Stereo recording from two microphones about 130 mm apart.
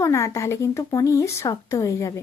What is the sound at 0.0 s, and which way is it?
Speech, 20° left (ahead or behind).